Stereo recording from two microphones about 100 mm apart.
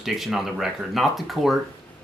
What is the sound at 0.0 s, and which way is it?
Speech, centre (ahead or behind).